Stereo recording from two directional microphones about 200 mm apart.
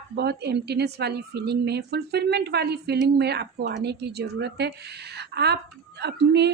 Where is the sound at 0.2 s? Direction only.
55° right (ahead or behind).